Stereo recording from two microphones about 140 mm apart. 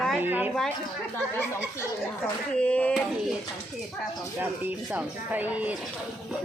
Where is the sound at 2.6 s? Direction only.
10° left (ahead or behind).